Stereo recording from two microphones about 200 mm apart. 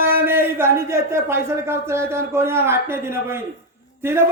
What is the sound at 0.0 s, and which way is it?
A man's voice, 10° right (ahead or behind).